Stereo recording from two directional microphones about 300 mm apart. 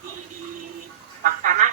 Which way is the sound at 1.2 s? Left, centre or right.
Right.